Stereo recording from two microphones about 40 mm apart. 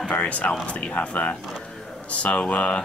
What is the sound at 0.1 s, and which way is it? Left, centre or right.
Speech, left.